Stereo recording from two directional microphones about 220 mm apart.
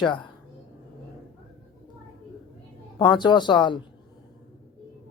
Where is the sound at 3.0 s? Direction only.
20° left (ahead or behind).